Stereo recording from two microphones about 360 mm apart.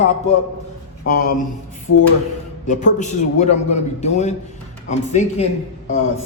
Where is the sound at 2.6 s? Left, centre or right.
Centre.